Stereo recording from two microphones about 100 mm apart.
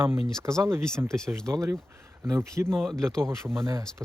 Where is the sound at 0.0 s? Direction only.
25° right (ahead or behind).